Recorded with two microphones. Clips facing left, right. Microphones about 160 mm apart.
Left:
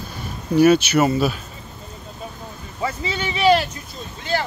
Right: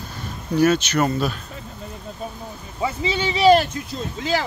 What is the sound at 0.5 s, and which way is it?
Speech, 10° left (ahead or behind).